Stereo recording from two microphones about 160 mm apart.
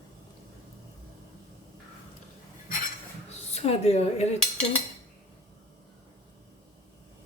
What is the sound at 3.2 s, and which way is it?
Speech, 40° left (ahead or behind).